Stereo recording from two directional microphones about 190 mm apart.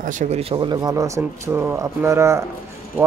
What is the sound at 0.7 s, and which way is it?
Speech, 15° right (ahead or behind).